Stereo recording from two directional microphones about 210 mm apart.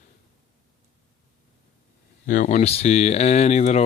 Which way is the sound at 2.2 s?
35° left (ahead or behind).